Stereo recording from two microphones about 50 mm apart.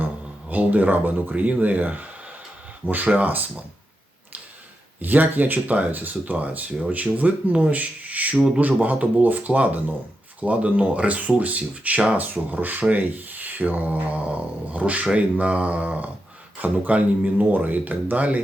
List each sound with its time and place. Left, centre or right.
0.5 s speech: right
4.9 s speech: right